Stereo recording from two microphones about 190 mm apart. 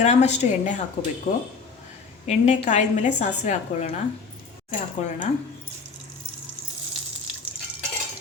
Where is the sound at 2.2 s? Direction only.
35° left (ahead or behind).